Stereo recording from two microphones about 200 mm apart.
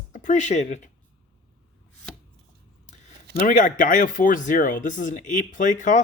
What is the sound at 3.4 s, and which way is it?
Speech, 40° left (ahead or behind).